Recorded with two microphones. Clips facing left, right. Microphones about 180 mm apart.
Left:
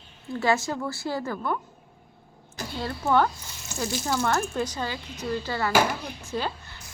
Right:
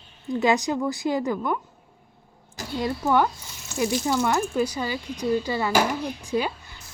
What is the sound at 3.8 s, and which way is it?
Speech, 10° right (ahead or behind).